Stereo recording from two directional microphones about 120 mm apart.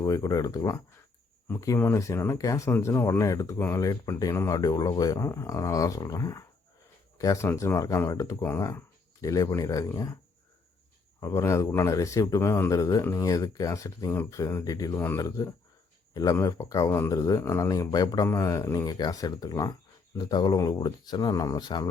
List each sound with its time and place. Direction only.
0.0 s speech: 30° left (ahead or behind)
11.2 s speech: 25° left (ahead or behind)